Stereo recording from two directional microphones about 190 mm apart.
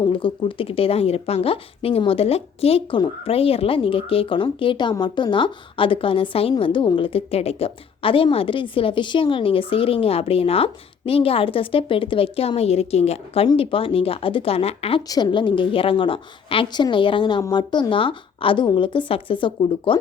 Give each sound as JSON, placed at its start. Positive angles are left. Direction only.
{"t": 0.1, "sound": "speech", "side_deg": 25}